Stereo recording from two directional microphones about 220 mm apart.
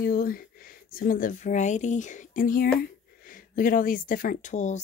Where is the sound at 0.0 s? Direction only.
40° left (ahead or behind).